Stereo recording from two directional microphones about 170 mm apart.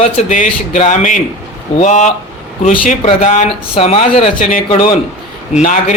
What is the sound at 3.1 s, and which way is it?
Speech, 40° left (ahead or behind).